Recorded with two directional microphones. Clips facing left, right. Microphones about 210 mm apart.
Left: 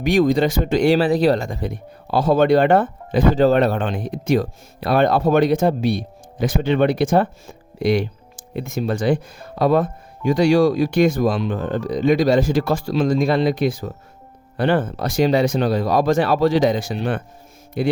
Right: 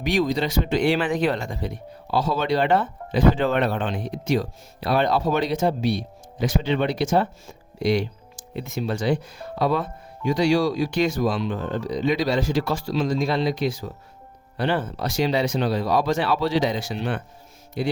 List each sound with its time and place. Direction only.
0.0 s speech: 50° left (ahead or behind)